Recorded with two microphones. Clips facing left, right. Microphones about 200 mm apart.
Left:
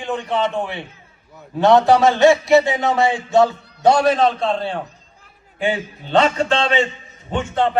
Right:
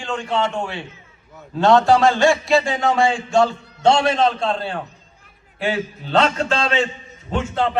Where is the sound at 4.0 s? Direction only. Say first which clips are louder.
Left 2 dB; centre (ahead or behind).